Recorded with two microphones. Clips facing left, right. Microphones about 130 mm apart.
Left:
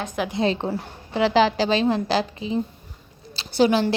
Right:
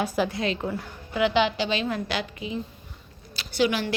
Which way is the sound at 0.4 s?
35° left (ahead or behind).